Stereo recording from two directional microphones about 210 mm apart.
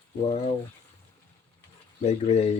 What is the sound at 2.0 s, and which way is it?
Speech, 30° left (ahead or behind).